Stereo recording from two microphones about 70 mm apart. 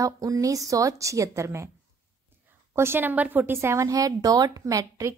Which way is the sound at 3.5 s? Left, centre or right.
Right.